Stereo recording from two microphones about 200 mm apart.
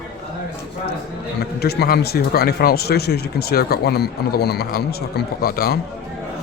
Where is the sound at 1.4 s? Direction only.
55° left (ahead or behind).